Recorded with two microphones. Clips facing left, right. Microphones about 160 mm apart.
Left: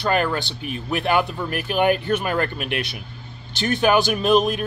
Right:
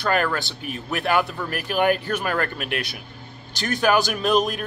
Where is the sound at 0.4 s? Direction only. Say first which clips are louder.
Left 2 dB; 45° right (ahead or behind).